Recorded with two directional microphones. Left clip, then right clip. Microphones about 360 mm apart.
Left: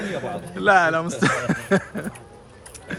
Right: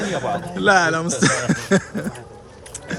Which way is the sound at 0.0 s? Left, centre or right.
Centre.